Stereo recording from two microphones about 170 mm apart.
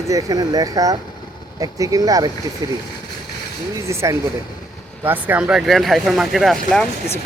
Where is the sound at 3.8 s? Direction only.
15° right (ahead or behind); by 6.8 s centre (ahead or behind).